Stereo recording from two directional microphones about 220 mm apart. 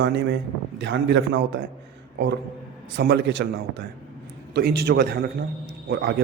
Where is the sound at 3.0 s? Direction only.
50° right (ahead or behind).